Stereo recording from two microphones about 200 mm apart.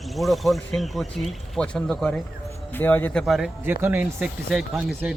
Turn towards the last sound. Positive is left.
turn(degrees=-5)  # may be behind; listen again after turning